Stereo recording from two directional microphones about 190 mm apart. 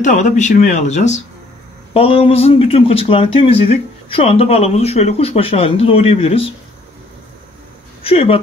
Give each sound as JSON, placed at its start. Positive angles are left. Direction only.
{"t": 0.0, "sound": "speech", "side_deg": 40}
{"t": 8.0, "sound": "speech", "side_deg": 30}